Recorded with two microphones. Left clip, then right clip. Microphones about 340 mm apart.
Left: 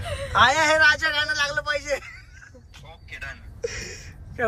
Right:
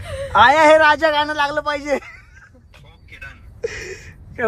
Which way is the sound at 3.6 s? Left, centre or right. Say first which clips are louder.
Right 5 dB; right.